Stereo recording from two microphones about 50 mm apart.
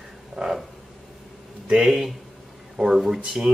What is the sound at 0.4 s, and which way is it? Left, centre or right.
Frog, centre.